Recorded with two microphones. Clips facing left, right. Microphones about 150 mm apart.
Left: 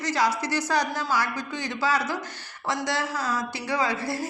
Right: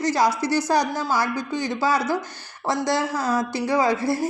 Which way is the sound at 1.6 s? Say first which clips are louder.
Right 3 dB; 40° right (ahead or behind).